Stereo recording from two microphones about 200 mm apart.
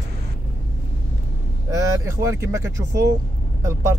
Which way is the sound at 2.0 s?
15° right (ahead or behind).